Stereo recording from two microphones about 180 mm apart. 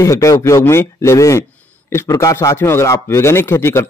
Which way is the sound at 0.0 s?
15° left (ahead or behind).